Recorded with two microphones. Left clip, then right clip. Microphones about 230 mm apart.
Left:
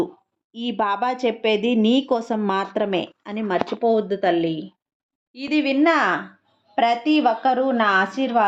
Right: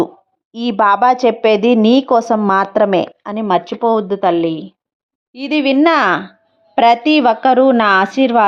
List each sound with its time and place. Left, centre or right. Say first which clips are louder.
0.5 s speech: right 10 dB; right